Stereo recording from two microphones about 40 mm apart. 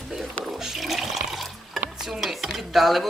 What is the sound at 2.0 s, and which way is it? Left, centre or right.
Speech, centre.